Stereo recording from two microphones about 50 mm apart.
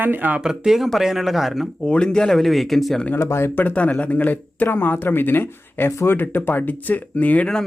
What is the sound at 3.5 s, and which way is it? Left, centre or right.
Speech, left.